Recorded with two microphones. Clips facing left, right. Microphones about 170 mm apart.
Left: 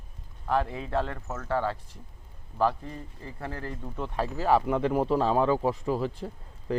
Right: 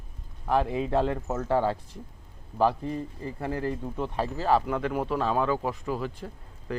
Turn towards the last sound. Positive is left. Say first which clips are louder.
# left 3 dB
turn(degrees=25)  # may be behind; listen again after turning